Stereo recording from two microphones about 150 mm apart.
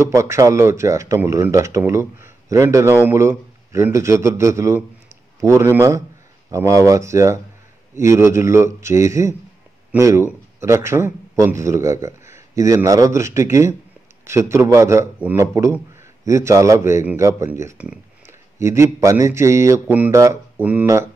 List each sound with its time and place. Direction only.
0.1 s speech: 20° right (ahead or behind)